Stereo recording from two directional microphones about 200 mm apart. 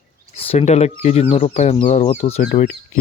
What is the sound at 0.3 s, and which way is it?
Speech, 30° left (ahead or behind).